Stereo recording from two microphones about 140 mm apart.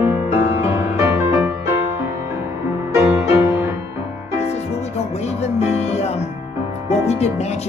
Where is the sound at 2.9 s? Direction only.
15° right (ahead or behind).